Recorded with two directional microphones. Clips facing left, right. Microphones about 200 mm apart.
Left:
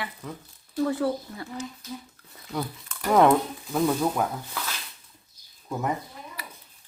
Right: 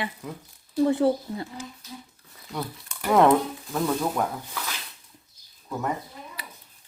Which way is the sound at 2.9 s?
5° right (ahead or behind).